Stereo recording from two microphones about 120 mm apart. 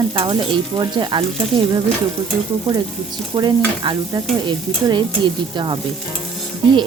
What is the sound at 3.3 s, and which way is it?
Speech, 35° right (ahead or behind).